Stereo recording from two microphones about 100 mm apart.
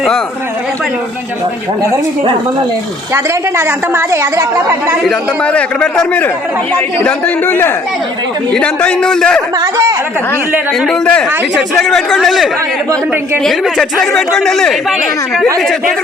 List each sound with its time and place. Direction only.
3.6 s a woman's voice: 25° right (ahead or behind)
5.4 s a man's voice: 10° left (ahead or behind)
11.0 s a man's voice: 10° left (ahead or behind)